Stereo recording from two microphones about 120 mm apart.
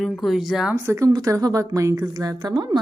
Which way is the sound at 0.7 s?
25° right (ahead or behind).